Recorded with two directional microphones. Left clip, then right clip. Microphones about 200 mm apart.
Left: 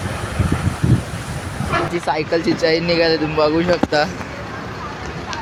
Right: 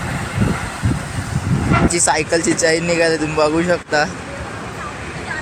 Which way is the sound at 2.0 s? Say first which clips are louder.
Right 2 dB; 10° right (ahead or behind).